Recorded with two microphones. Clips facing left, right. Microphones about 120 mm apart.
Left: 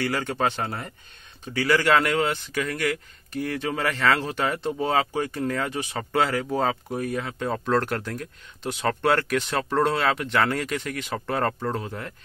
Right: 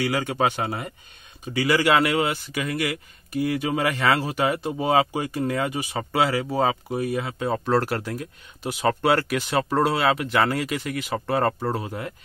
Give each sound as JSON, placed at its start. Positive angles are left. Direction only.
{"t": 0.0, "sound": "speech", "side_deg": -10}